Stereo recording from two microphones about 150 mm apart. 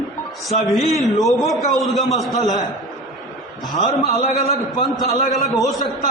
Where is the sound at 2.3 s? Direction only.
25° left (ahead or behind).